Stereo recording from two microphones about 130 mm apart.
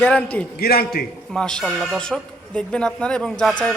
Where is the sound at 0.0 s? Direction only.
10° left (ahead or behind).